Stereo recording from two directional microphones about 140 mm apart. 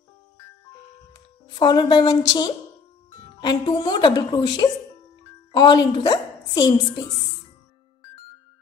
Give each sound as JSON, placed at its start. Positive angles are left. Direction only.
{"t": 1.5, "sound": "speech", "side_deg": 30}